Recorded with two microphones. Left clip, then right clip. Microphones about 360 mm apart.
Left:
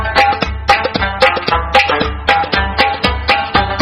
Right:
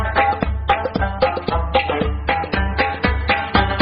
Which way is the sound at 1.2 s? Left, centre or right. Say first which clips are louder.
Left 8 dB; left.